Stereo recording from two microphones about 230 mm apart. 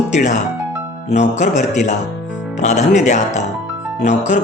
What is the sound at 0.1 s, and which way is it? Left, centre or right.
Speech, left.